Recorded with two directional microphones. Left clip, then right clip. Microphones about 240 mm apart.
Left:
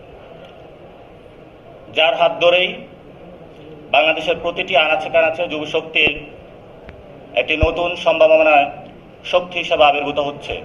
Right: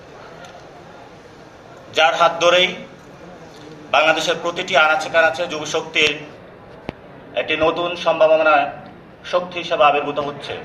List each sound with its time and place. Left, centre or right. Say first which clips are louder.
2.0 s a man's voice: even; right
3.9 s a man's voice: left 1 dB; right
7.5 s a man's voice: right 3 dB; right